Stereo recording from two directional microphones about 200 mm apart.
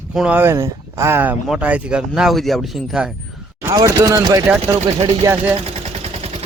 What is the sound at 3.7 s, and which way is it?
A man's voice, 15° right (ahead or behind).